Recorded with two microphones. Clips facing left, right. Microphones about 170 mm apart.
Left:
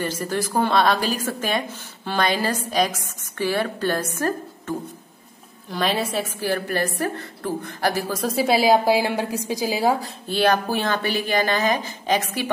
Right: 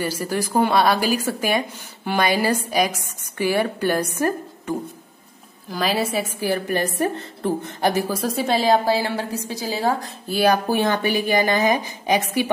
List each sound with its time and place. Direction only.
0.0 s a woman's voice: 10° right (ahead or behind)
5.7 s a woman's voice: centre (ahead or behind)
6.1 s a woman's voice: 15° right (ahead or behind)
8.1 s a woman's voice: centre (ahead or behind)
10.0 s a woman's voice: 5° right (ahead or behind)